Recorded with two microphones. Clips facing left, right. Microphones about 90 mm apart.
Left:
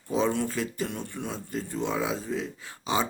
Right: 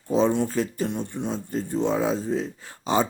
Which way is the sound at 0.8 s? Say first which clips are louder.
Right 6 dB; 20° right (ahead or behind).